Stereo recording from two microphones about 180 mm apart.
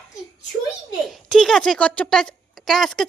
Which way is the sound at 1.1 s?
5° left (ahead or behind).